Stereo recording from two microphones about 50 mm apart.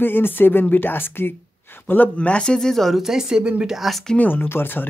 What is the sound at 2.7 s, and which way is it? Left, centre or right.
Speech, centre.